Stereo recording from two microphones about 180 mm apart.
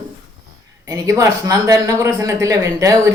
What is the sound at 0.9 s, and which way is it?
Speech, 15° right (ahead or behind).